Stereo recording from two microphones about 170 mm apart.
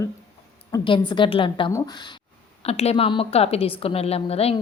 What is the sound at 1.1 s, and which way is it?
A woman's voice, 30° left (ahead or behind).